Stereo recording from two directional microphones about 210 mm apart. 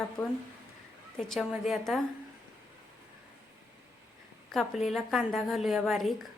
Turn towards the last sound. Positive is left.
turn(degrees=0)  # may be behind; listen again after turning